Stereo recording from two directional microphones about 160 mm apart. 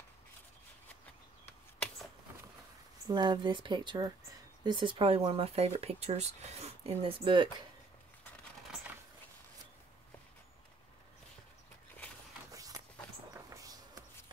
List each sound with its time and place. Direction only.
3.1 s speech: 25° right (ahead or behind)
13.3 s vehicle: 20° right (ahead or behind)